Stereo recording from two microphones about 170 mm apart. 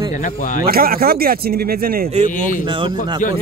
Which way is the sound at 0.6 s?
60° right (ahead or behind).